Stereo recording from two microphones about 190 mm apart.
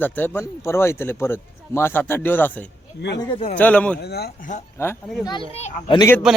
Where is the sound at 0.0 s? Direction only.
10° left (ahead or behind).